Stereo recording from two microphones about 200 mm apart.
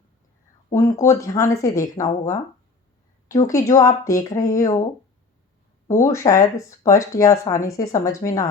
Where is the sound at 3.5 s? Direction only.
15° left (ahead or behind).